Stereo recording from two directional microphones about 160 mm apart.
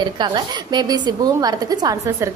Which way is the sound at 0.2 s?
25° right (ahead or behind).